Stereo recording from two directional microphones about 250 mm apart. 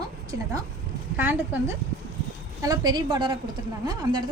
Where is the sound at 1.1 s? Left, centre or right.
Centre.